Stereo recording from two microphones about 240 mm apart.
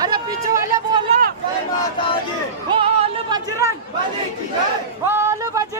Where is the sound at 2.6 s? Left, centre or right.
Right.